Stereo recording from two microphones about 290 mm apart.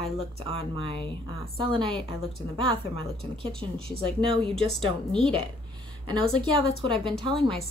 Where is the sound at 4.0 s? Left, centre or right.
Centre.